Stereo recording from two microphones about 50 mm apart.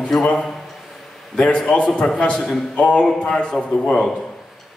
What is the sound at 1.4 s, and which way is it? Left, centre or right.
A man's voice, centre.